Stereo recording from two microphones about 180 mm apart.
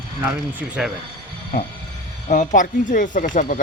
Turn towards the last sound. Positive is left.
turn(degrees=45)  # may be behind; listen again after turning